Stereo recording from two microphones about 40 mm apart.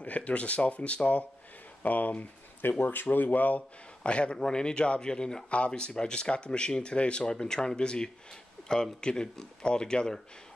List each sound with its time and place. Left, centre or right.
0.0 s speech: left
1.8 s speech: left
2.8 s speech: left
4.0 s speech: left